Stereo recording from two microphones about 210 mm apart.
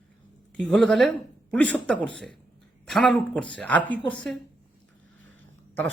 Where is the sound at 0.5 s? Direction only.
5° left (ahead or behind).